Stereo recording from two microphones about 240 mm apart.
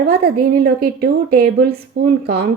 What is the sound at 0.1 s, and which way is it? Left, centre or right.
Speech, right.